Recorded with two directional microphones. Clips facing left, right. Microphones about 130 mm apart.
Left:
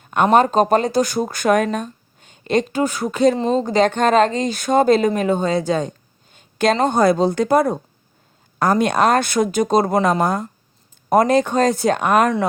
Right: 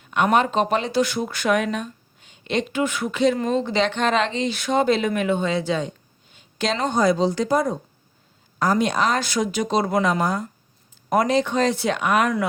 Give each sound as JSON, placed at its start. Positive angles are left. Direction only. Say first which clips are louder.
{"t": 0.0, "sound": "a sound", "louder": "left 4 dB", "side_deg": 45}
{"t": 0.3, "sound": "speech", "louder": "left 7 dB", "side_deg": 40}
{"t": 3.3, "sound": "speech", "louder": "left 4 dB", "side_deg": 25}
{"t": 3.6, "sound": "speech", "louder": "left 5 dB", "side_deg": 45}